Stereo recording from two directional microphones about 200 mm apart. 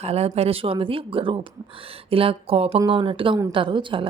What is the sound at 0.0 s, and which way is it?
Speech, 30° right (ahead or behind).